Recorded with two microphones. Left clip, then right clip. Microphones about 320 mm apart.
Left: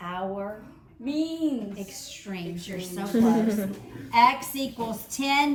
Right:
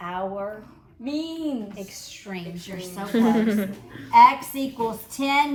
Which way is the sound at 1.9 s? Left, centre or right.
Centre.